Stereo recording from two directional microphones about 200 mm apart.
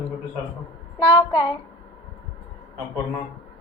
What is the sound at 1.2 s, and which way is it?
Speech, 20° left (ahead or behind).